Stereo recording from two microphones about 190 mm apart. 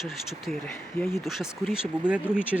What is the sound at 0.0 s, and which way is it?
Speech, centre (ahead or behind).